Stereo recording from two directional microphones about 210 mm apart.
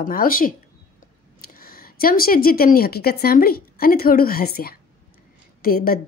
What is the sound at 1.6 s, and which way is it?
Speech, 45° left (ahead or behind).